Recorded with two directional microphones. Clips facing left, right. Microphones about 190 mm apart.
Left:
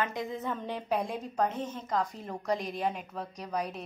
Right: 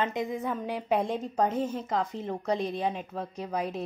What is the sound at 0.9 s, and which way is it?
A woman's voice, 25° right (ahead or behind).